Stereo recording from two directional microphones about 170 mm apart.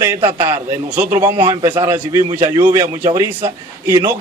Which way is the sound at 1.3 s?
25° right (ahead or behind).